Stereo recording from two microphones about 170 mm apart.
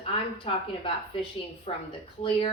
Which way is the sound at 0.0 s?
30° left (ahead or behind).